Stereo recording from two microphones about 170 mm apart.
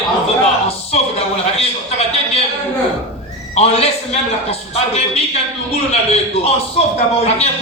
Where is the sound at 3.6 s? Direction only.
35° left (ahead or behind).